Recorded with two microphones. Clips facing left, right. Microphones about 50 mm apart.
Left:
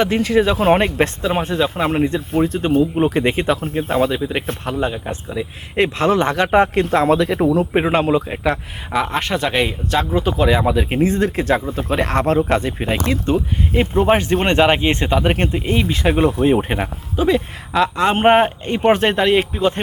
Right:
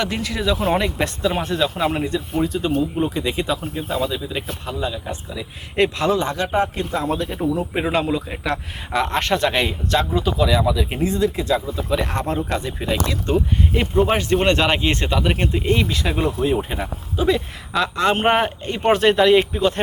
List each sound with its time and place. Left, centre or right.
0.0 s speech: left
1.2 s speech: left
6.3 s speech: left
7.7 s speech: left
8.4 s speech: centre
10.2 s speech: left
11.4 s speech: left
12.5 s speech: left
14.0 s speech: left
16.0 s speech: left
17.2 s speech: centre
19.3 s speech: centre